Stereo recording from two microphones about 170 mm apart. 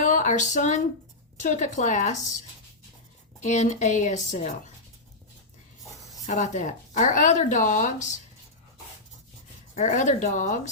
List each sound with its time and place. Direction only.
0.0 s a sound: 45° left (ahead or behind)
1.4 s speech: 45° left (ahead or behind)
3.4 s speech: 45° left (ahead or behind)
6.2 s speech: 45° left (ahead or behind)
9.7 s speech: 45° left (ahead or behind)